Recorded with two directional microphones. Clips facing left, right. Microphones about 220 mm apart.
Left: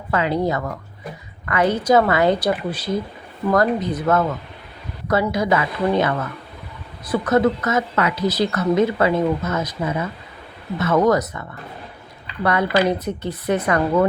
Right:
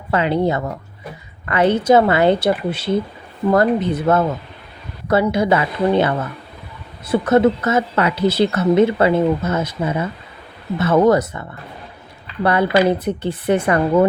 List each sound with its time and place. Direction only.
0.1 s a woman's voice: 25° right (ahead or behind)